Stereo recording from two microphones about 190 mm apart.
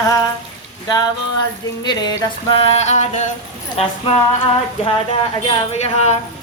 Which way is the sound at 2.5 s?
35° left (ahead or behind).